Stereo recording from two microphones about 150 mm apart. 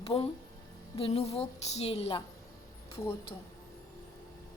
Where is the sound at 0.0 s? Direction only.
40° left (ahead or behind).